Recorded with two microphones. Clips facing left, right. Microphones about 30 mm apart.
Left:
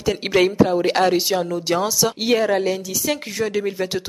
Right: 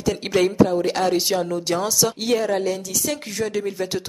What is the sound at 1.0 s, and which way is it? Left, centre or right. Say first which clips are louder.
A woman's voice: left 2 dB; centre.